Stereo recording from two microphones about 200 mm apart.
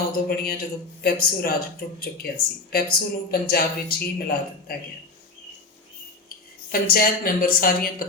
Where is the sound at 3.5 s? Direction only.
50° left (ahead or behind).